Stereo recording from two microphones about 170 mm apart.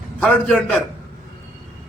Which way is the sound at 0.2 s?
5° left (ahead or behind).